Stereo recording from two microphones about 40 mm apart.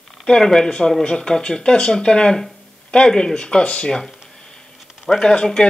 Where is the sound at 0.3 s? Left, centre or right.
Centre.